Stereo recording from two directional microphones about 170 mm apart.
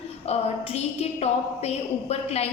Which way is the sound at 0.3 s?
35° left (ahead or behind).